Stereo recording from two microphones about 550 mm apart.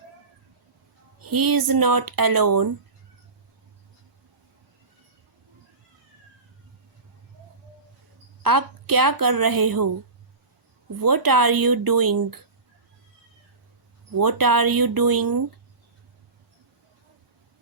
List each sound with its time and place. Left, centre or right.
1.2 s speech: right
8.4 s speech: right
11.0 s speech: right
14.2 s speech: right